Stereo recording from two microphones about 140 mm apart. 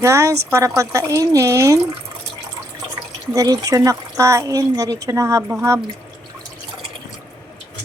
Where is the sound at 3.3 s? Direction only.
25° right (ahead or behind).